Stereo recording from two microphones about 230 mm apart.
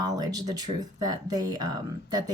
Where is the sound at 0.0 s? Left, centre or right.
Centre.